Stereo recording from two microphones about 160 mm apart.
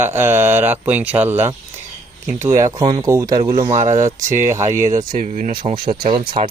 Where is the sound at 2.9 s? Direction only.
20° right (ahead or behind).